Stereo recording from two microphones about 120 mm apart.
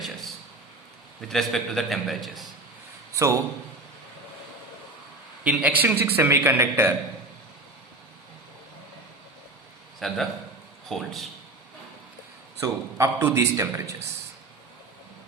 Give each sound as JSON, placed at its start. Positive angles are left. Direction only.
{"t": 1.3, "sound": "a man's voice", "side_deg": 0}
{"t": 3.1, "sound": "a sound", "side_deg": -25}
{"t": 5.4, "sound": "a man's voice", "side_deg": -10}
{"t": 10.0, "sound": "a man's voice", "side_deg": 0}
{"t": 12.5, "sound": "a man's voice", "side_deg": -25}